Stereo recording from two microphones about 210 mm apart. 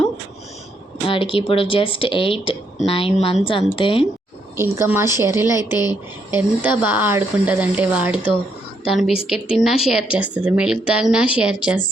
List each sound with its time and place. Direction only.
1.0 s speech: 25° left (ahead or behind)
4.5 s speech: 10° right (ahead or behind)
5.7 s speech: 20° left (ahead or behind)
6.3 s a woman's voice: 10° right (ahead or behind)